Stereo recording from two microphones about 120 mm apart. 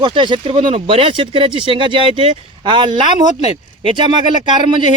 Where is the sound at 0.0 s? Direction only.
40° right (ahead or behind).